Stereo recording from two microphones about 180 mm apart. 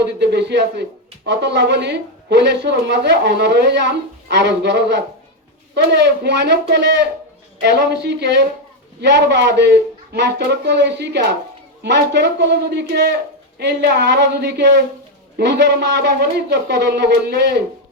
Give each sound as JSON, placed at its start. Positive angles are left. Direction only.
{"t": 0.0, "sound": "speech", "side_deg": -70}